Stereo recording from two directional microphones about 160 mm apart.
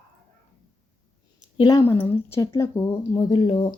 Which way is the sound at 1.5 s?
25° left (ahead or behind).